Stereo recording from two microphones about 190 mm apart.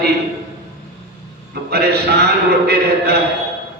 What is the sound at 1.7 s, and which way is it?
A man's voice, 60° right (ahead or behind).